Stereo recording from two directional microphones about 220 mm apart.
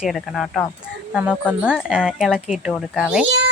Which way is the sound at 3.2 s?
55° right (ahead or behind).